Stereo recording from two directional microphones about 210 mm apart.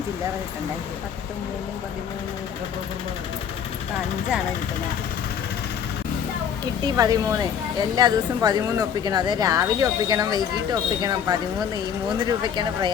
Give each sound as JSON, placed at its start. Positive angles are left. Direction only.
{"t": 6.8, "sound": "a woman's voice", "side_deg": -15}